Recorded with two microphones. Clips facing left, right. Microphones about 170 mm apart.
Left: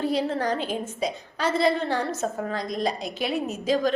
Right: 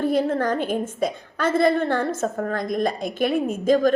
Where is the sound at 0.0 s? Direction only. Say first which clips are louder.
Right 4 dB; 50° right (ahead or behind).